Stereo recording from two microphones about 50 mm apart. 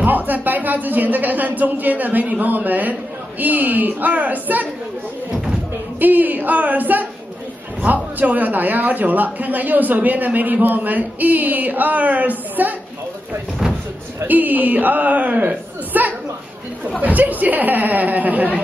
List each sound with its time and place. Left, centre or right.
0.0 s a man's voice: right
5.9 s a man's voice: right
14.2 s a man's voice: right